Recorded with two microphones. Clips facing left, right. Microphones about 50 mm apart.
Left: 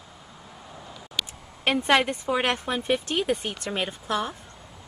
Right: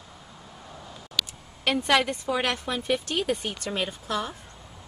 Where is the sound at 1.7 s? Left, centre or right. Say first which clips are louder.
Left 1 dB; left.